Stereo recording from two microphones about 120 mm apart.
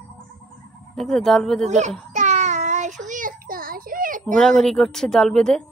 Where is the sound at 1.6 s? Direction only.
75° right (ahead or behind).